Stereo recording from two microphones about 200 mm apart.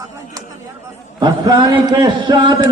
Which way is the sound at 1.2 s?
20° right (ahead or behind).